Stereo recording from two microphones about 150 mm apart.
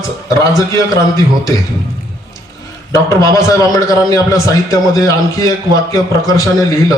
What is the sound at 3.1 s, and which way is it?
A man's voice, 20° left (ahead or behind).